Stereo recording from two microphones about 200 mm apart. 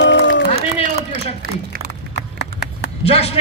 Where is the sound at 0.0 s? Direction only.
65° left (ahead or behind).